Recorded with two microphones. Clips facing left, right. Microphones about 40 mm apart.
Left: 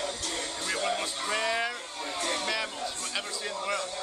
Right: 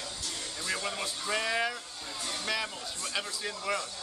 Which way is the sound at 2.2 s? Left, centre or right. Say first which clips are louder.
Left 6 dB; left.